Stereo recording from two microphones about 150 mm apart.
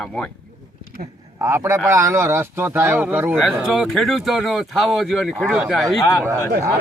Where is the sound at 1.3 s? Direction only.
15° right (ahead or behind).